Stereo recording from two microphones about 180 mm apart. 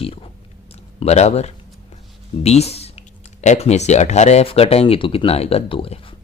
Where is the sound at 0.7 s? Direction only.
35° left (ahead or behind).